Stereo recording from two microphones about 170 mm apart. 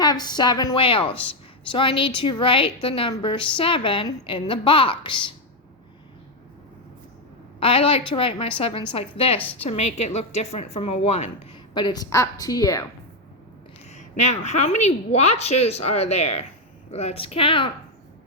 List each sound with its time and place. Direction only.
0.0 s a woman's voice: 25° left (ahead or behind)
7.6 s a woman's voice: 30° left (ahead or behind)
11.7 s a woman's voice: 25° left (ahead or behind)
13.9 s a woman's voice: 40° left (ahead or behind)